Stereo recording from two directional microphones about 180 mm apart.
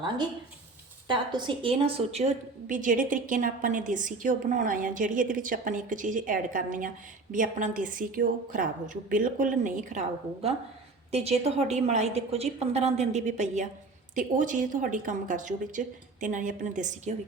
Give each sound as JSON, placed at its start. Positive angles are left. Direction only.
{"t": 1.0, "sound": "a woman's voice", "side_deg": -25}
{"t": 2.6, "sound": "a woman's voice", "side_deg": -45}